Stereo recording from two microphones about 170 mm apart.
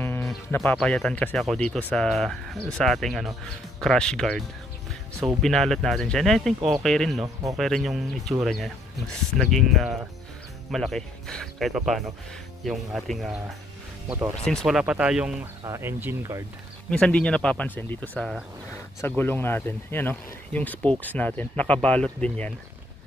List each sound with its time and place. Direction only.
0.0 s music: 15° left (ahead or behind)
0.6 s speech: 5° left (ahead or behind)
14.4 s speech: 5° left (ahead or behind)
15.6 s speech: 15° right (ahead or behind)
16.9 s speech: 5° left (ahead or behind)